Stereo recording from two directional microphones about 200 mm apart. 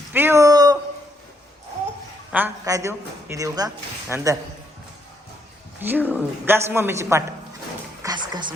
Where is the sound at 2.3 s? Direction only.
10° right (ahead or behind).